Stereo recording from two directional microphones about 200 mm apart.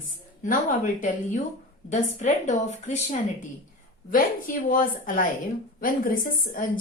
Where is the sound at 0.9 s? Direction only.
40° left (ahead or behind).